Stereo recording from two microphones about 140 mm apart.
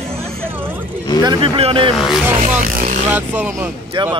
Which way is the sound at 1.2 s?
40° right (ahead or behind).